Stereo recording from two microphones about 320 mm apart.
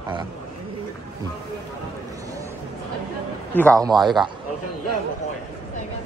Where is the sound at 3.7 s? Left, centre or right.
Centre.